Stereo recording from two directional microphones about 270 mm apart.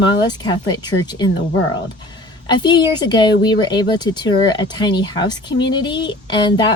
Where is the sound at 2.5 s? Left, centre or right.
Centre.